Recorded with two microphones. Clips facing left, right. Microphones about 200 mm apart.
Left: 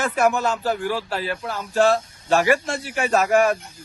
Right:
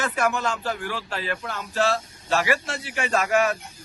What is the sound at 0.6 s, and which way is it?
Speech, 40° left (ahead or behind).